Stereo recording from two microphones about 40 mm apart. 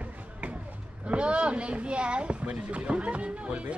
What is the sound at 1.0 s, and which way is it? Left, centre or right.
Speech, right.